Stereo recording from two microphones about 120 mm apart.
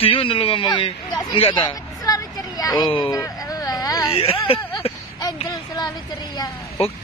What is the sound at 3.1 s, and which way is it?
Speech, 30° left (ahead or behind).